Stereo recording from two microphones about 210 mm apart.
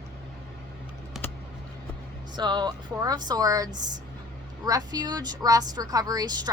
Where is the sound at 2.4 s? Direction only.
20° right (ahead or behind).